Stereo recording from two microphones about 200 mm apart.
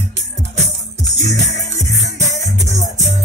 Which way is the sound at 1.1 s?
35° right (ahead or behind).